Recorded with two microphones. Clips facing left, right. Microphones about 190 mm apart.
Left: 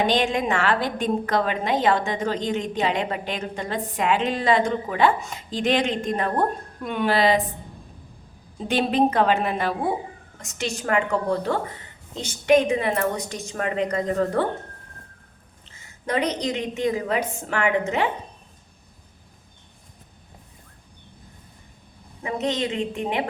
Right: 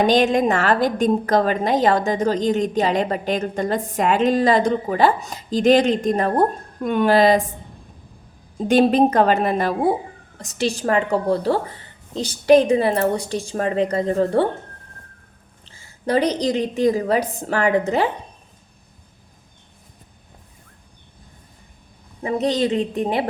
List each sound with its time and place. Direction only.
0.0 s a woman's voice: 40° right (ahead or behind)
8.6 s a woman's voice: 45° right (ahead or behind); by 14.4 s 30° right (ahead or behind)
15.6 s a woman's voice: 30° right (ahead or behind)
22.2 s a woman's voice: 35° right (ahead or behind)